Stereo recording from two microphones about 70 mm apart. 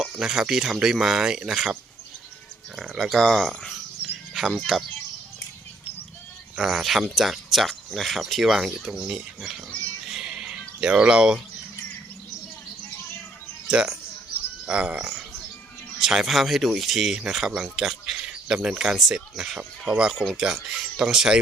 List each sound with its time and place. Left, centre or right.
0.2 s speech: centre
3.0 s speech: centre
6.6 s speech: centre
10.1 s a sound: centre
13.7 s speech: centre
16.0 s speech: centre